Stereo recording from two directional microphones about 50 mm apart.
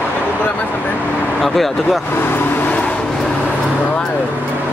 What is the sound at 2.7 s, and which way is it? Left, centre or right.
Vehicle, left.